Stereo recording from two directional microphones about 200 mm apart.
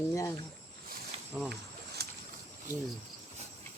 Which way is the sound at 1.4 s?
5° left (ahead or behind).